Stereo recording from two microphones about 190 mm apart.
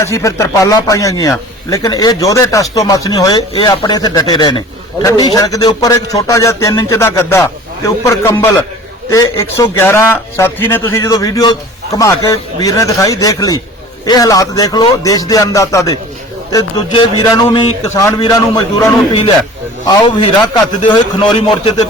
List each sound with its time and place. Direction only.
0.0 s a man's voice: 15° left (ahead or behind)